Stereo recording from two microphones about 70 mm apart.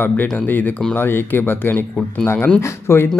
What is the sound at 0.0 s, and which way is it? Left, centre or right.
Speech, left.